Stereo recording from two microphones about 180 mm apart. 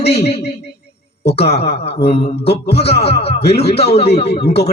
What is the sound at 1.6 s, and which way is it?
A man's voice, 35° left (ahead or behind).